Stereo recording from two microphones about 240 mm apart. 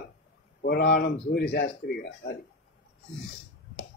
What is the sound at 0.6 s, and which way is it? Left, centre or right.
A man's voice, left.